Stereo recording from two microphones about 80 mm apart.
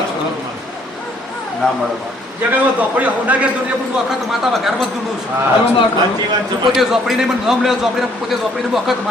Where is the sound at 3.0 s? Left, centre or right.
Centre.